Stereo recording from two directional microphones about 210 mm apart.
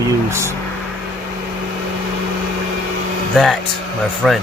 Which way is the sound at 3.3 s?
Centre (ahead or behind).